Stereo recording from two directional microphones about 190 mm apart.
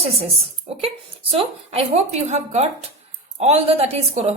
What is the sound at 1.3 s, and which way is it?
A woman's voice, 30° right (ahead or behind).